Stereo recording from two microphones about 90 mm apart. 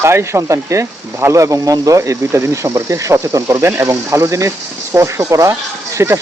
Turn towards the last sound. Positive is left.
turn(degrees=-35)  # may be behind; listen again after turning